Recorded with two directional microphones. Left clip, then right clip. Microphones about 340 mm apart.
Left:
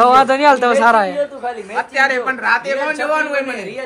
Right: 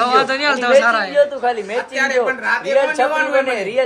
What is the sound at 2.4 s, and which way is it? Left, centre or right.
Speech, centre.